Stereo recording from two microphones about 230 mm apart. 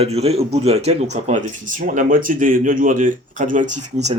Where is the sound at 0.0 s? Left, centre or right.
Right.